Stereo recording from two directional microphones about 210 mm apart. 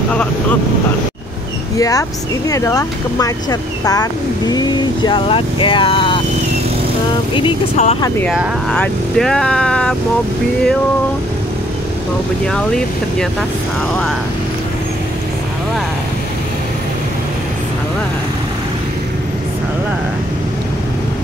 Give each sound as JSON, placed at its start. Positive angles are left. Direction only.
{"t": 1.8, "sound": "speech", "side_deg": 15}
{"t": 7.3, "sound": "speech", "side_deg": 25}
{"t": 8.3, "sound": "speech", "side_deg": 0}
{"t": 12.5, "sound": "speech", "side_deg": 5}